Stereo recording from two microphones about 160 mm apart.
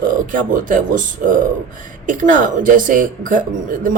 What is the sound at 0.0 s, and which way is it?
Speech, 60° right (ahead or behind).